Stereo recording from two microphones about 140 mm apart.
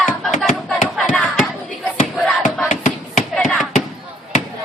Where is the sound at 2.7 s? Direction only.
60° left (ahead or behind).